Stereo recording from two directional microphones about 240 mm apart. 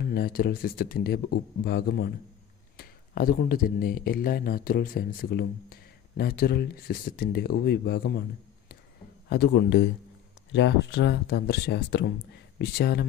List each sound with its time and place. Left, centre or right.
0.0 s speech: left
9.3 s speech: left